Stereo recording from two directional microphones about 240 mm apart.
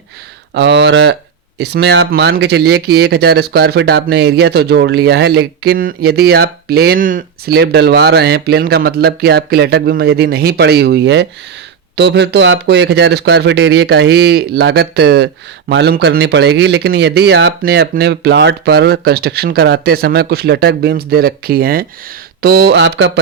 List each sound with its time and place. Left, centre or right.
0.5 s speech: right